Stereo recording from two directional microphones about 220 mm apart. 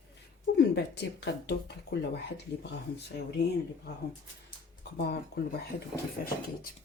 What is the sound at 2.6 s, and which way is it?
Speech, 50° left (ahead or behind).